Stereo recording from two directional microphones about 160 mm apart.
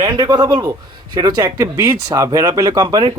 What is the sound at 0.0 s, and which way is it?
A man's voice, 25° right (ahead or behind).